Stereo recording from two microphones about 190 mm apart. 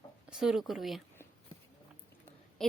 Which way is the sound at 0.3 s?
5° right (ahead or behind).